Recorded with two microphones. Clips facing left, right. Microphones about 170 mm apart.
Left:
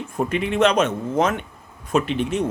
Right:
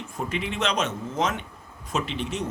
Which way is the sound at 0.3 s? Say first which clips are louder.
Left 9 dB; 55° left (ahead or behind).